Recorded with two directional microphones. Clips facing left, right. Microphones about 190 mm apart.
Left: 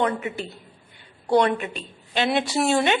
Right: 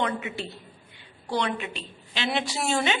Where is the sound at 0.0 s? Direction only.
45° left (ahead or behind).